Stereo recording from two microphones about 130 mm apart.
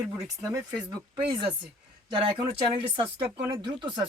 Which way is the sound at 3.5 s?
40° right (ahead or behind).